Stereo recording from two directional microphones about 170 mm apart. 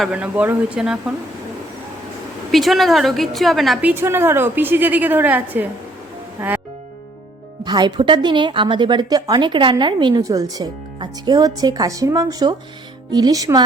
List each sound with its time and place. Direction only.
0.0 s a woman's voice: 5° right (ahead or behind)
2.5 s a woman's voice: centre (ahead or behind)
7.6 s a woman's voice: 25° right (ahead or behind)